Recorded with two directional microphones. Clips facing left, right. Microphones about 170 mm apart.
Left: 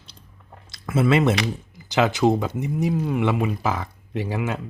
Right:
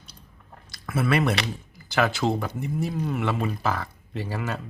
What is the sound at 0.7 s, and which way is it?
Speech, 25° left (ahead or behind).